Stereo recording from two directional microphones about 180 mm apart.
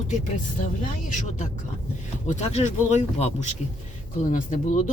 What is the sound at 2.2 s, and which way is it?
Speech, 40° left (ahead or behind).